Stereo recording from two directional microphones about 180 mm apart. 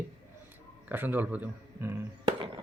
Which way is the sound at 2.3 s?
25° right (ahead or behind).